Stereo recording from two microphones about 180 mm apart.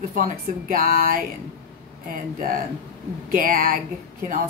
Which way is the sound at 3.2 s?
55° right (ahead or behind).